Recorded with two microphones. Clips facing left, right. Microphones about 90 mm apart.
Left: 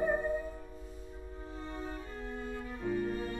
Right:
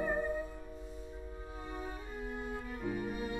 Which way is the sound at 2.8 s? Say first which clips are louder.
Left 4 dB; 10° right (ahead or behind).